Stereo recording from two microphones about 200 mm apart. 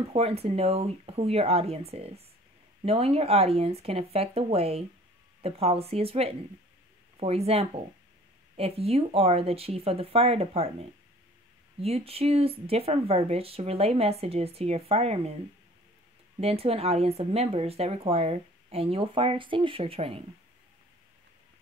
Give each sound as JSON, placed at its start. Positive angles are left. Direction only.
{"t": 0.1, "sound": "speech", "side_deg": -30}
{"t": 16.3, "sound": "speech", "side_deg": -30}